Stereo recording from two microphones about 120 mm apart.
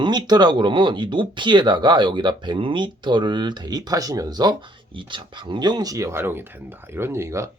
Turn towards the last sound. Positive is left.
turn(degrees=-25)  # may be behind; listen again after turning